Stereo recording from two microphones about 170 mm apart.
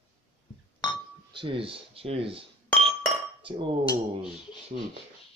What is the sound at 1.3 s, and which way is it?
Speech, 30° right (ahead or behind).